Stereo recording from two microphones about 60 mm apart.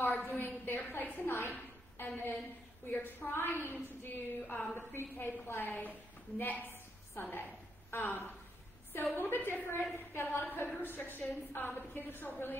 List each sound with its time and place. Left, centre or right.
0.0 s a woman's voice: left